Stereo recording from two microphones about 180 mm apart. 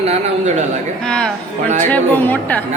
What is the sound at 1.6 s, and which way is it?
Speech, 45° right (ahead or behind).